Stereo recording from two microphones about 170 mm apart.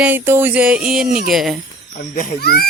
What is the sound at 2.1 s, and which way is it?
Speech, 65° left (ahead or behind).